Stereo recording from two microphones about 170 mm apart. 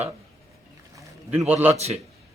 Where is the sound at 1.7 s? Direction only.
40° right (ahead or behind).